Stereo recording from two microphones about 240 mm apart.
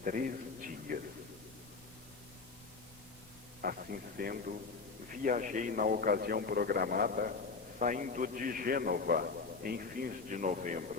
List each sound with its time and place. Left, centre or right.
0.0 s a man's voice: right
3.6 s a man's voice: right